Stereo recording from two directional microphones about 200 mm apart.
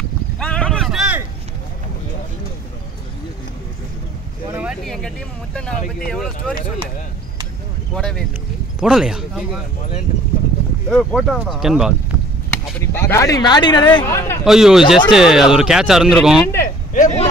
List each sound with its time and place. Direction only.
0.4 s a sound: 5° left (ahead or behind)
4.5 s vehicle: 10° right (ahead or behind)
4.8 s vehicle: 5° left (ahead or behind)
6.0 s speech: 5° left (ahead or behind)
7.9 s speech: 5° left (ahead or behind)
10.9 s speech: centre (ahead or behind)
12.7 s speech: 10° left (ahead or behind)
14.4 s speech: centre (ahead or behind)
16.6 s a sound: 40° left (ahead or behind)